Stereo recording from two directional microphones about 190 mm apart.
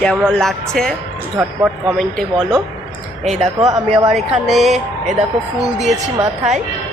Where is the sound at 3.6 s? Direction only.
20° right (ahead or behind).